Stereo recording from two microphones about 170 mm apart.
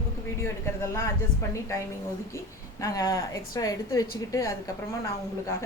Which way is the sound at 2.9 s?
20° left (ahead or behind).